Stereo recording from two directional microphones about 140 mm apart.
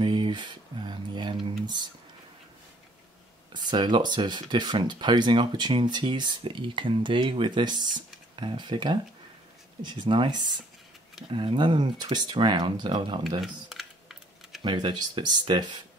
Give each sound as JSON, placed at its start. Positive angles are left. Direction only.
{"t": 0.0, "sound": "a sound", "side_deg": -35}
{"t": 3.5, "sound": "speech", "side_deg": -35}
{"t": 13.4, "sound": "typing", "side_deg": 0}
{"t": 14.6, "sound": "speech", "side_deg": -35}